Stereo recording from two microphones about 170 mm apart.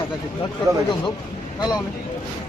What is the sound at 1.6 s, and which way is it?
Speech, 25° left (ahead or behind).